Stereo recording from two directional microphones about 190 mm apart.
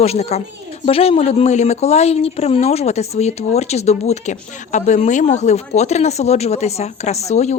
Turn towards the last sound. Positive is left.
turn(degrees=35)  # may be behind; listen again after turning